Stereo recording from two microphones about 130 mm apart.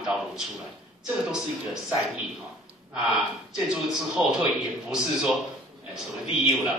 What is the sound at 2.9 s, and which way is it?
Speech, 5° right (ahead or behind).